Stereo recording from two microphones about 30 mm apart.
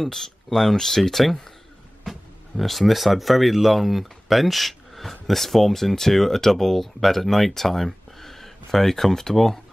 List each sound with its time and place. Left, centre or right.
0.0 s speech: centre